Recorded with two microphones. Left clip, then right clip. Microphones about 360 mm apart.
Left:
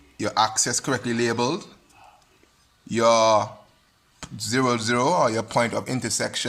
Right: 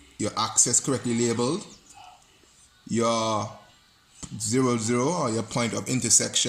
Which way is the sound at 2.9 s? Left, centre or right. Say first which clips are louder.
Left 7 dB; left.